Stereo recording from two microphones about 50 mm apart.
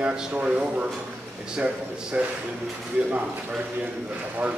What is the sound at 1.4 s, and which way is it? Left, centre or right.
A man's voice, centre.